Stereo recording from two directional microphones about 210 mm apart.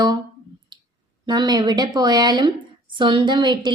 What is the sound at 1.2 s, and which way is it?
A woman's voice, 20° right (ahead or behind).